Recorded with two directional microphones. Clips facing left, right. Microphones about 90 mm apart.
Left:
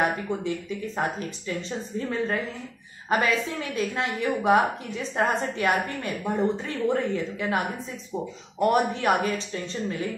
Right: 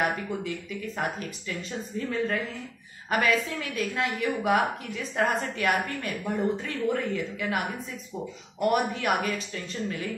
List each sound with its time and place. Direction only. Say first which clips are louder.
0.0 s a woman's voice: left 3 dB; 30° left (ahead or behind)